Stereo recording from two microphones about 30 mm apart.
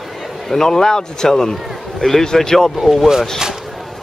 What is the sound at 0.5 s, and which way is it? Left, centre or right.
Speech, centre.